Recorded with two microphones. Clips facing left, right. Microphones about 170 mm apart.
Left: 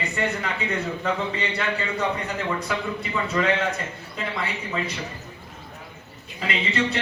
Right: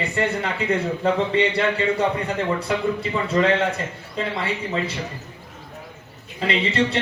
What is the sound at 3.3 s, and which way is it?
A man's voice, 30° right (ahead or behind).